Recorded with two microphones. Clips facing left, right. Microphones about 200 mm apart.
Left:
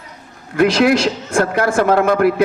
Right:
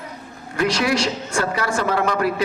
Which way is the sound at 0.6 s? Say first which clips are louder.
Left 7 dB; 55° left (ahead or behind).